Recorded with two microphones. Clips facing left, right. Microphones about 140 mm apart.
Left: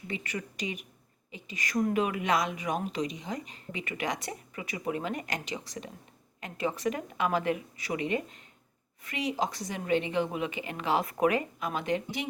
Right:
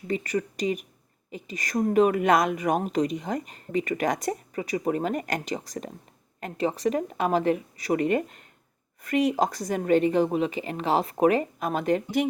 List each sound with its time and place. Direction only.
0.1 s a woman's voice: 40° right (ahead or behind)